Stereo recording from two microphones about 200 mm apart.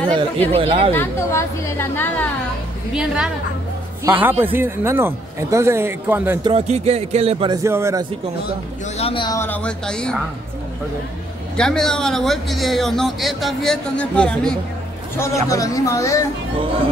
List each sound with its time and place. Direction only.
0.5 s a man's voice: 30° right (ahead or behind)
0.9 s a woman's voice: 15° left (ahead or behind)
2.9 s a man's voice: 5° right (ahead or behind)
6.4 s a man's voice: 30° right (ahead or behind)
8.9 s a woman's voice: 25° left (ahead or behind); by 10.1 s 5° left (ahead or behind)
11.5 s a man's voice: 5° left (ahead or behind)
15.1 s a woman's voice: 15° left (ahead or behind)